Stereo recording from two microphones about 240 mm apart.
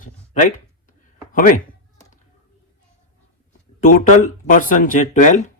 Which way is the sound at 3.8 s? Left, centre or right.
Left.